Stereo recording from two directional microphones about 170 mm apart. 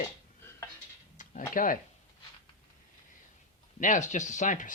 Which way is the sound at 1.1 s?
50° left (ahead or behind).